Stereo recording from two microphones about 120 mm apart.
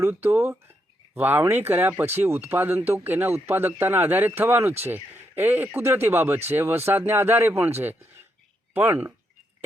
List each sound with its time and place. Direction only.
0.0 s speech: 20° right (ahead or behind)